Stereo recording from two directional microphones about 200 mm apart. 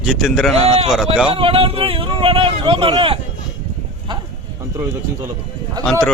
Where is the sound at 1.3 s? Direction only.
30° right (ahead or behind).